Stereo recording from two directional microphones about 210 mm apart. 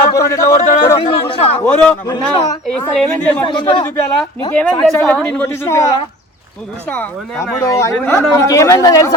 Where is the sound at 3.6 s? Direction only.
20° left (ahead or behind).